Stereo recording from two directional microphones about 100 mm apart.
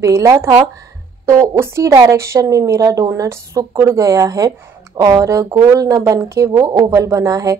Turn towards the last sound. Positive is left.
turn(degrees=-35)  # may be behind; listen again after turning